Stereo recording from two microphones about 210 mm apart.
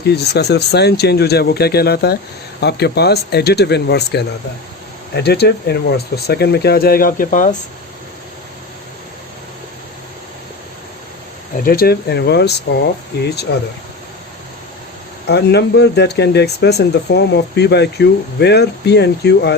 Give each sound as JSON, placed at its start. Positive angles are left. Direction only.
{"t": 0.0, "sound": "speech", "side_deg": 50}
{"t": 11.6, "sound": "speech", "side_deg": 45}
{"t": 15.3, "sound": "speech", "side_deg": 50}